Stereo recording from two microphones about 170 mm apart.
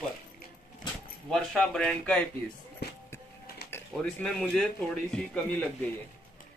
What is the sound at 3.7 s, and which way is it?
Speech, 10° left (ahead or behind).